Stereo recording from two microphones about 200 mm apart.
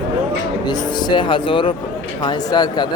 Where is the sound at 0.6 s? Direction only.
20° left (ahead or behind).